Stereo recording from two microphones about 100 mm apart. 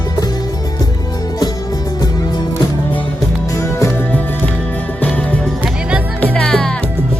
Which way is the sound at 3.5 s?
30° left (ahead or behind).